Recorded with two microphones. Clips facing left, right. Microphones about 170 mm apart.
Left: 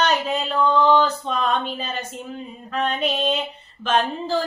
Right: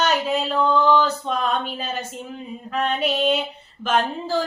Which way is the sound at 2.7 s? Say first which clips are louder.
Right 1 dB; 5° right (ahead or behind).